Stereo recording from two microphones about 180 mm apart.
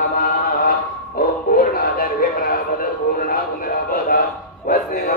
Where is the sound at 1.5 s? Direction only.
55° left (ahead or behind).